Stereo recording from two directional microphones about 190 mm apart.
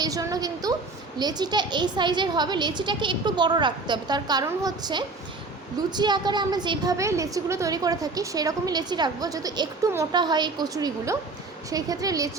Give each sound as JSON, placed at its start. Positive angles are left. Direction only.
{"t": 0.0, "sound": "a woman's voice", "side_deg": -20}